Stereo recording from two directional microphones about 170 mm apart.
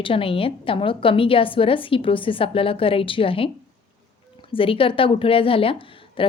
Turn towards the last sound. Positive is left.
turn(degrees=30)  # may be behind; listen again after turning